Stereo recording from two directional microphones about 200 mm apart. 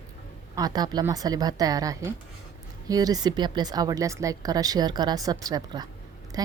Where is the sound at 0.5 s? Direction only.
20° right (ahead or behind).